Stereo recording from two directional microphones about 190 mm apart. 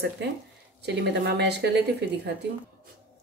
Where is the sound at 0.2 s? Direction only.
65° right (ahead or behind).